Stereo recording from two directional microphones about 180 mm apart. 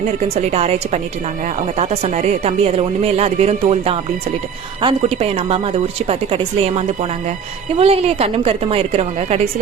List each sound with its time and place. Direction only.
0.5 s speech: 35° right (ahead or behind)